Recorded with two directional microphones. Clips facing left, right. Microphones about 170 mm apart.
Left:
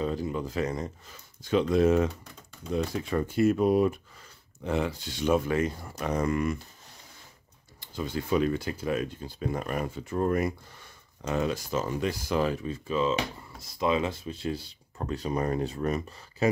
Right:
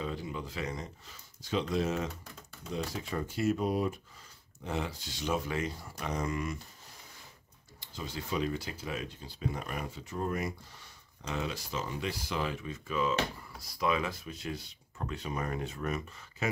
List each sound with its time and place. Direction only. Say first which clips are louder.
0.0 s speech: left 7 dB; 45° left (ahead or behind); by 6.6 s 60° left (ahead or behind)
7.8 s speech: left 8 dB; 55° left (ahead or behind); by 16.4 s 35° left (ahead or behind)